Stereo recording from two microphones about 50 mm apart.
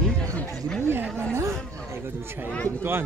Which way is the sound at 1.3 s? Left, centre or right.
Right.